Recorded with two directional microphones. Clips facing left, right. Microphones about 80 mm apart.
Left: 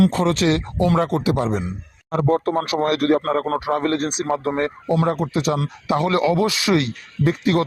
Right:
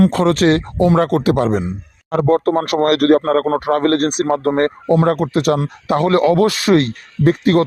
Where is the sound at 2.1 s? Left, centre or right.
Right.